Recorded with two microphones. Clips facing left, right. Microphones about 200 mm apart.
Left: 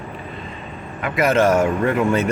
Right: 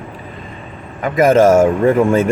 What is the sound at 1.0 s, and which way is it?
A man's voice, 45° right (ahead or behind).